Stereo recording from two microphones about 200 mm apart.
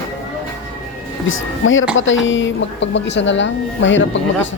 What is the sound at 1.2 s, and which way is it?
A woman's voice, 75° left (ahead or behind).